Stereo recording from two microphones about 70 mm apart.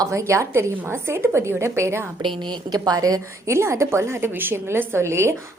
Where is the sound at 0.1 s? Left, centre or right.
Right.